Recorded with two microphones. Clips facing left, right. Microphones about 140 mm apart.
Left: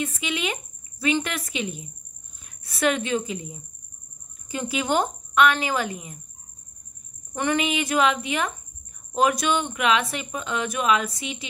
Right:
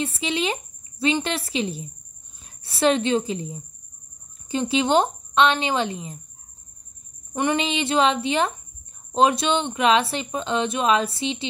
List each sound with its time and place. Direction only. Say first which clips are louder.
0.0 s a woman's voice: right 3 dB; 30° right (ahead or behind)
7.3 s speech: right 1 dB; 25° right (ahead or behind)